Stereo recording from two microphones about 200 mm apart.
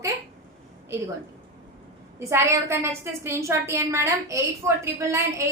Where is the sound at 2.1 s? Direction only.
15° right (ahead or behind).